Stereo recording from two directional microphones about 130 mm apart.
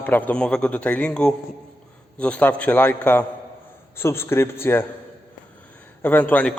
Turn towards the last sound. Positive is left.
turn(degrees=10)  # may be behind; listen again after turning